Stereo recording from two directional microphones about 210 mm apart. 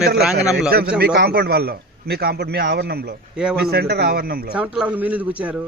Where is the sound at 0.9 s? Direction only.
50° right (ahead or behind).